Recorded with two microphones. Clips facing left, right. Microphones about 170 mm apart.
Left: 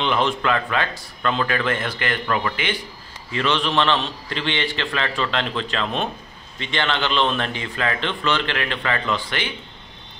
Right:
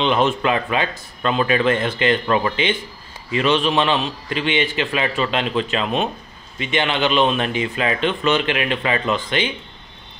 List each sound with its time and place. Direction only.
0.0 s a man's voice: 20° right (ahead or behind)